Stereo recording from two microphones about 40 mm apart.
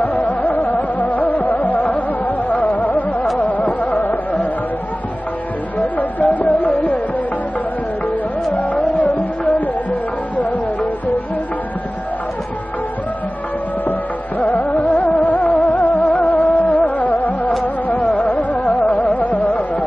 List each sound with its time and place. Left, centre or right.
0.2 s music: left
5.8 s music: left
8.9 s music: left
14.4 s music: left
19.1 s music: left